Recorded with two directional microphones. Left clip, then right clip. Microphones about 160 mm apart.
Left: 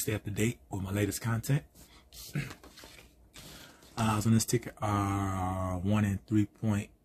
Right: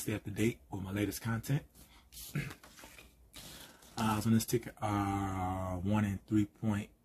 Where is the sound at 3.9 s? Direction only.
20° left (ahead or behind).